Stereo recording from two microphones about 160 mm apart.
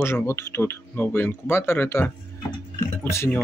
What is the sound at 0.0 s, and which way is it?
Speech, 15° left (ahead or behind).